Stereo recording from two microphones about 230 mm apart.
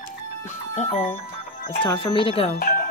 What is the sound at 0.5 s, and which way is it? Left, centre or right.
A woman's voice, left.